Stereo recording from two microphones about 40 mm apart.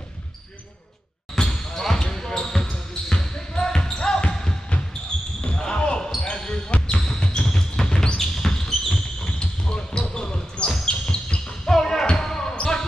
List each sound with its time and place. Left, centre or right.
1.3 s basketball bounce: centre
11.7 s music: centre
12.2 s basketball bounce: centre